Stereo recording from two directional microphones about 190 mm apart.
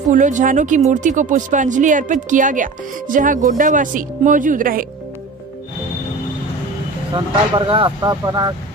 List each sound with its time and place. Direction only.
0.1 s speech: 40° right (ahead or behind)
7.2 s speech: 25° right (ahead or behind)